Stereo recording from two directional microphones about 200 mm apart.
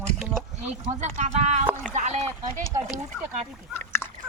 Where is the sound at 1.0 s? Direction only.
35° right (ahead or behind).